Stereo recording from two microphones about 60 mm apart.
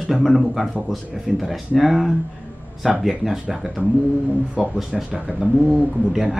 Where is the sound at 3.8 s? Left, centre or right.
Right.